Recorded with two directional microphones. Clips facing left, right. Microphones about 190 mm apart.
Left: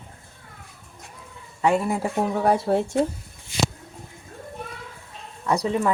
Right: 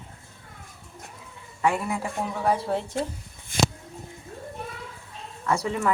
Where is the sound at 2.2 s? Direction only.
45° left (ahead or behind).